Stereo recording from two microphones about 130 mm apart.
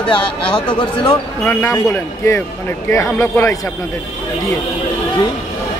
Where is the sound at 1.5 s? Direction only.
20° left (ahead or behind).